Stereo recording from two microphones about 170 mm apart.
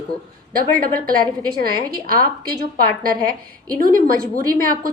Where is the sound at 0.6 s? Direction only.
60° right (ahead or behind).